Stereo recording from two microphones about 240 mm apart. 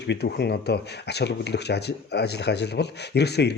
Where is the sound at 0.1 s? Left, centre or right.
Left.